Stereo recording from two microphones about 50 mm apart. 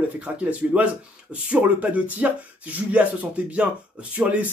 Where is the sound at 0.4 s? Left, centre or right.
Right.